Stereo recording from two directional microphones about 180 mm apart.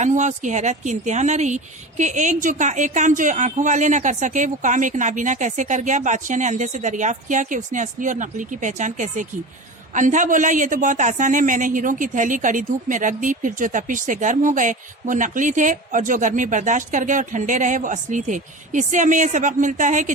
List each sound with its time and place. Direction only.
0.0 s a man's voice: 40° right (ahead or behind)